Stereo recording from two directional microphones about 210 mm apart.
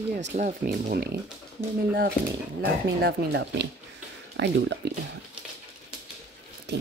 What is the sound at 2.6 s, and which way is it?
Speech, 55° right (ahead or behind).